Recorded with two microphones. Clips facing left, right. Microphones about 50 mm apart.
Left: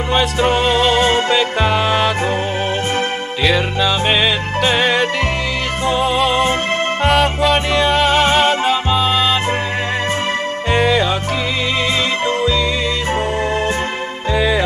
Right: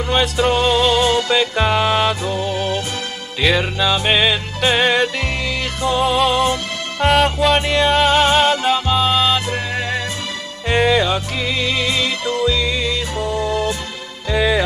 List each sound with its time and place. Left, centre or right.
0.5 s music: centre
3.4 s music: centre
10.7 s music: centre
13.4 s music: left
14.3 s music: centre